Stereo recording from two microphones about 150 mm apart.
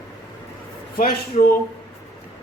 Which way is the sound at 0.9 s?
75° left (ahead or behind).